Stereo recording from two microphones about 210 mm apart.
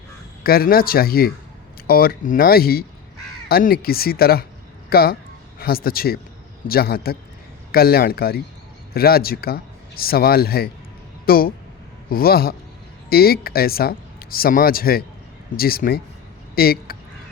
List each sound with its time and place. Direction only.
0.4 s a man's voice: 45° left (ahead or behind)